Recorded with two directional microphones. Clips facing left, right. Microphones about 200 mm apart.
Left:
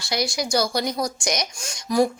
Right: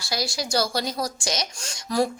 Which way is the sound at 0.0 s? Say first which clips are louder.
Left 3 dB; 20° left (ahead or behind).